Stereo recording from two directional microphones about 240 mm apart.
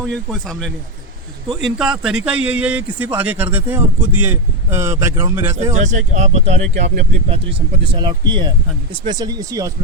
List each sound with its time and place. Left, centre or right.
0.0 s a man's voice: centre
5.7 s speech: right; by 9.7 s centre